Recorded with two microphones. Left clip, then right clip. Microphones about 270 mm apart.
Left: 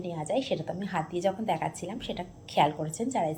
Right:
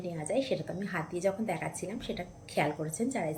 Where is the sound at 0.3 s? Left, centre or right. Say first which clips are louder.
Left 2 dB; centre.